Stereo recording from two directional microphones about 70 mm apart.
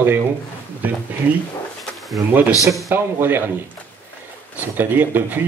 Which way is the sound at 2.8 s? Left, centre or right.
Right.